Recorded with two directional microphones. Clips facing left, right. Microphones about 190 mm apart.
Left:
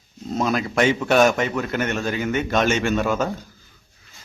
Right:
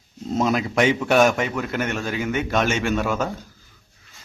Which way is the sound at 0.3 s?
20° right (ahead or behind).